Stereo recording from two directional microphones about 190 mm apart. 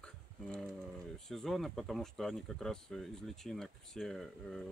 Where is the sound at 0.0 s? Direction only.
5° left (ahead or behind).